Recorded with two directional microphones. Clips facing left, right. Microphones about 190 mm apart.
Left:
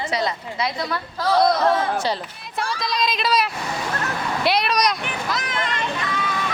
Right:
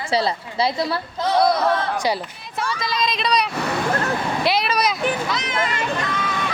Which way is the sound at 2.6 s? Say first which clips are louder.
Right 1 dB; centre (ahead or behind).